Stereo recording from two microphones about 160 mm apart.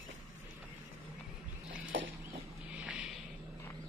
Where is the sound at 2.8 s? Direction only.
5° right (ahead or behind).